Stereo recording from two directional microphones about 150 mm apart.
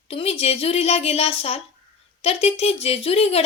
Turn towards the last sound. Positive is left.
turn(degrees=40)  # may be behind; listen again after turning